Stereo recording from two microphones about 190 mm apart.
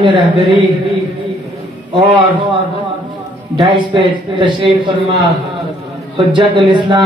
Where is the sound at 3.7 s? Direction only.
25° right (ahead or behind).